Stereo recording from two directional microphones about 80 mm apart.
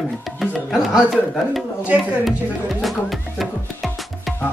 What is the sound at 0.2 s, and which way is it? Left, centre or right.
Music, centre.